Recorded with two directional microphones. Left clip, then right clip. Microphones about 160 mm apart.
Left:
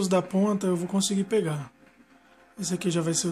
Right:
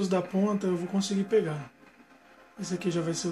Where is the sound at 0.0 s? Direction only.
45° left (ahead or behind).